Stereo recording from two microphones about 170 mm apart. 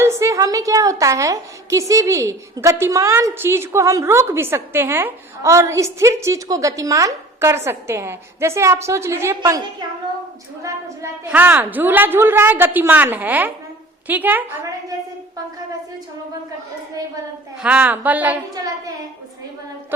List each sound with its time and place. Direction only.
0.0 s a woman's voice: 15° right (ahead or behind)
11.3 s a woman's voice: 10° right (ahead or behind)
17.6 s a woman's voice: 10° right (ahead or behind)